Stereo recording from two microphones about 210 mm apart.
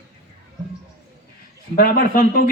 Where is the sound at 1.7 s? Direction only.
40° left (ahead or behind).